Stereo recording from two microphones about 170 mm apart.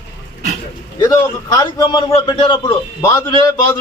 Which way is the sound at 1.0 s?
20° left (ahead or behind).